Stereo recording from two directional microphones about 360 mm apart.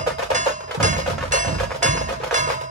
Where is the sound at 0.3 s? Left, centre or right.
Centre.